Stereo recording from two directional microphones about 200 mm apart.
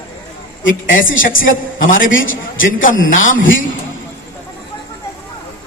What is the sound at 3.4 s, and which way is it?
Speech, 75° left (ahead or behind).